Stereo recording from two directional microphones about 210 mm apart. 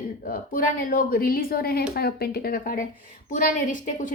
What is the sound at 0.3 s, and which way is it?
A woman's voice, 40° left (ahead or behind).